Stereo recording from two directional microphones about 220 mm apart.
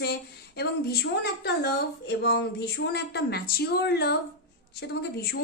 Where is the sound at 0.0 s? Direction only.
50° left (ahead or behind).